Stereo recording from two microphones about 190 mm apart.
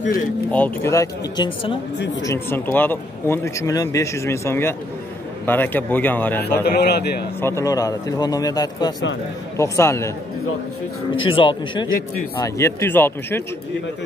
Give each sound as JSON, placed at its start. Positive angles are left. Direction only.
{"t": 0.5, "sound": "speech", "side_deg": 10}
{"t": 2.2, "sound": "speech", "side_deg": 10}
{"t": 6.6, "sound": "a man's voice", "side_deg": 55}
{"t": 7.4, "sound": "a man's voice", "side_deg": 15}
{"t": 11.2, "sound": "a man's voice", "side_deg": 25}
{"t": 12.4, "sound": "speech", "side_deg": 15}